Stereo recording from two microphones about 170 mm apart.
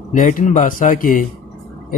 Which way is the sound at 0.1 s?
50° left (ahead or behind).